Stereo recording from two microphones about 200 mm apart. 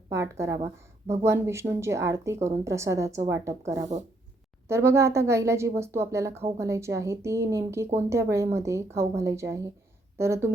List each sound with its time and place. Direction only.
0.1 s a woman's voice: 15° right (ahead or behind)
3.9 s speech: 35° right (ahead or behind)
4.7 s a woman's voice: 15° right (ahead or behind)